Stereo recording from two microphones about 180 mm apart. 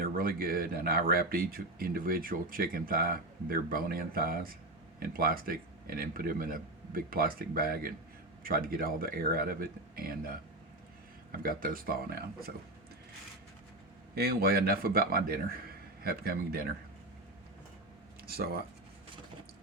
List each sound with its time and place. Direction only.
0.0 s speech: 55° right (ahead or behind)
14.2 s speech: 60° right (ahead or behind)
18.3 s speech: 60° right (ahead or behind)